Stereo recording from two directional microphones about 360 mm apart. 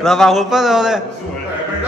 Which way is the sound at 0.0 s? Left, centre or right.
Centre.